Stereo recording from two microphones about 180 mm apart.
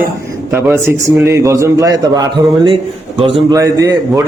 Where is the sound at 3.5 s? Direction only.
20° right (ahead or behind).